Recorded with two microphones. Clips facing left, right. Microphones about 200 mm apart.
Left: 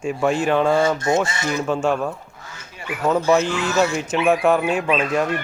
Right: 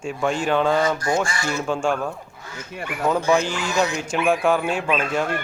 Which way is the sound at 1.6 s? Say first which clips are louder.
Left 2 dB; 5° left (ahead or behind).